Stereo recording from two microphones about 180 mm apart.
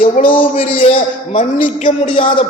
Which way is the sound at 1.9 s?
30° left (ahead or behind).